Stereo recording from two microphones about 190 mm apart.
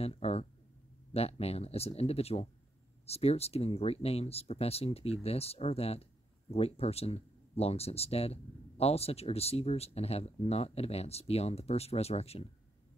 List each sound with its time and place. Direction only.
0.0 s speech: 30° left (ahead or behind)